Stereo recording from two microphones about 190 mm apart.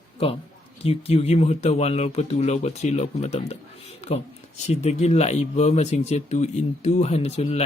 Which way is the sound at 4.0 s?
35° left (ahead or behind).